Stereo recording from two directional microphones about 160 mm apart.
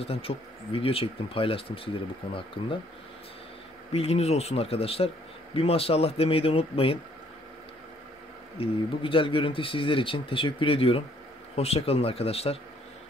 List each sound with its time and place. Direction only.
0.0 s speech: 40° left (ahead or behind)
3.9 s speech: 40° left (ahead or behind)
8.5 s speech: 35° left (ahead or behind)